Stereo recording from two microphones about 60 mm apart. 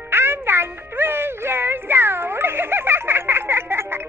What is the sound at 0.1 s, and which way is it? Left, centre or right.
Music, right.